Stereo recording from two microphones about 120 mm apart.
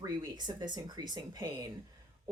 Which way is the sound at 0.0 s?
35° right (ahead or behind).